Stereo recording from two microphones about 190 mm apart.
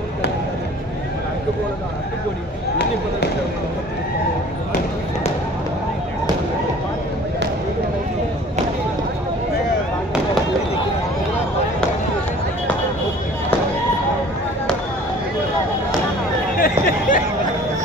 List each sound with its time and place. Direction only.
16.5 s chatter: 50° left (ahead or behind)